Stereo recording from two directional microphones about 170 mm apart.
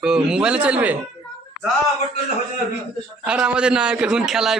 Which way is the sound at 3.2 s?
5° right (ahead or behind).